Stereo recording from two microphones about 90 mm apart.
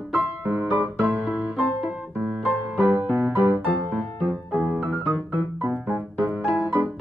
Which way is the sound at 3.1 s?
20° right (ahead or behind).